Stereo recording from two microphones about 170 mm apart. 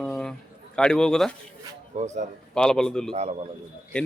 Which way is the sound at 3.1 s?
35° right (ahead or behind).